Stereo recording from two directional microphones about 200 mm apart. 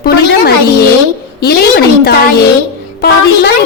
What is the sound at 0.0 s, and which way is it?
Music, 50° left (ahead or behind).